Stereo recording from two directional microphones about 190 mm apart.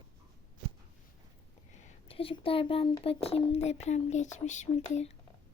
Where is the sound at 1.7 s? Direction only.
35° left (ahead or behind).